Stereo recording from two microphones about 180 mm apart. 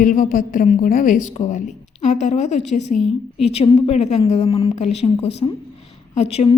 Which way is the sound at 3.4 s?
35° left (ahead or behind).